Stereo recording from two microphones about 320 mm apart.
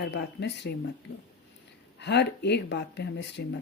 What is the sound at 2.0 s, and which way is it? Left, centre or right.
Speech, left.